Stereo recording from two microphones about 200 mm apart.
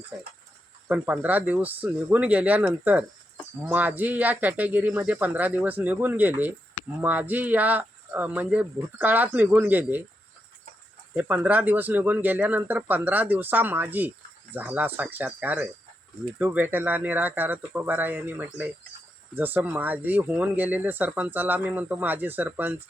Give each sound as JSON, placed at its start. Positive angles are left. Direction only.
{"t": 0.1, "sound": "speech", "side_deg": 0}
{"t": 11.1, "sound": "speech", "side_deg": -10}